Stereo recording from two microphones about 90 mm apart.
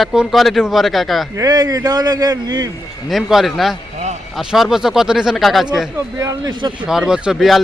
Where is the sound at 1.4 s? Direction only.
45° right (ahead or behind).